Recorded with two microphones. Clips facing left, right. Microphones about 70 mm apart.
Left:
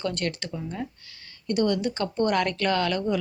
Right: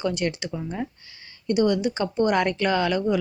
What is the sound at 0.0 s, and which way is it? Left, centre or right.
Speech, centre.